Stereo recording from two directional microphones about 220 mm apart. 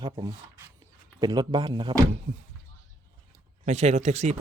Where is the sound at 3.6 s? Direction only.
30° right (ahead or behind).